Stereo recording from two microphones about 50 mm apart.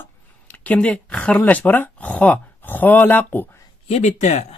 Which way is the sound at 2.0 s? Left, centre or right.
Left.